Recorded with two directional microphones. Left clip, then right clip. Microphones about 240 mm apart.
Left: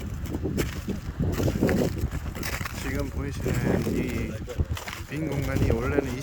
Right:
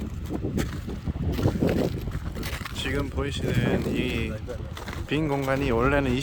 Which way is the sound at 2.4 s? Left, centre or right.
Left.